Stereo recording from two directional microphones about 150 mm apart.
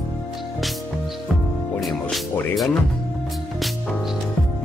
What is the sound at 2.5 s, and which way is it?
Speech, centre (ahead or behind).